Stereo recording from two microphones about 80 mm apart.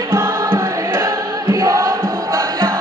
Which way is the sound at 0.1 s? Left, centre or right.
Right.